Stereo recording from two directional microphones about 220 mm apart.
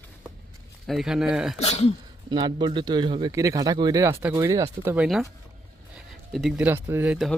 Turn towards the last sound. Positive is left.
turn(degrees=0)  # may be behind; listen again after turning